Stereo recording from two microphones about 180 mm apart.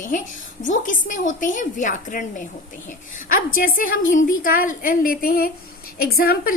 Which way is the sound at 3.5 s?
50° left (ahead or behind).